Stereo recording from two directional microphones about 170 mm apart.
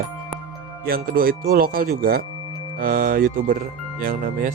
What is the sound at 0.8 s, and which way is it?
Speech, 60° right (ahead or behind).